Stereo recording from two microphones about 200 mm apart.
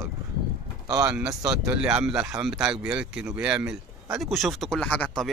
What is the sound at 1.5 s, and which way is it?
Speech, 5° right (ahead or behind).